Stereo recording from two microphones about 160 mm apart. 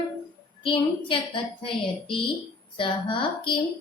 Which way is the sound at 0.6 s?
35° left (ahead or behind).